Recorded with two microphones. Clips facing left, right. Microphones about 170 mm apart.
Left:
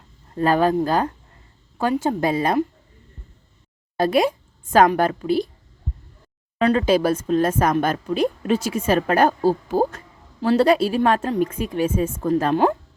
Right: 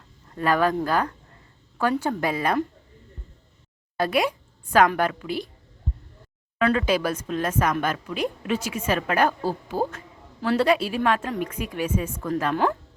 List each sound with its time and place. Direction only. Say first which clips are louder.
0.3 s speech: left 4 dB; 30° left (ahead or behind)
3.9 s a woman's voice: left 5 dB; 25° left (ahead or behind)
6.6 s speech: left 4 dB; 30° left (ahead or behind)